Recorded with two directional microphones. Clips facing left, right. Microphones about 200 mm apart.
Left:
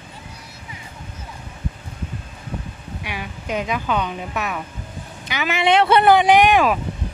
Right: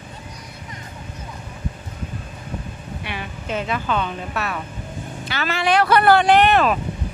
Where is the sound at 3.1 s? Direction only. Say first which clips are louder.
Left 1 dB; 10° left (ahead or behind).